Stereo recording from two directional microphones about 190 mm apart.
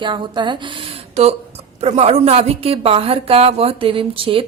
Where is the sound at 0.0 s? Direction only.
25° right (ahead or behind).